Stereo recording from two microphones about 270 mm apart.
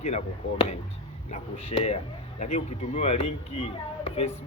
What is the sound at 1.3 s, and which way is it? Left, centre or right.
Speech, left.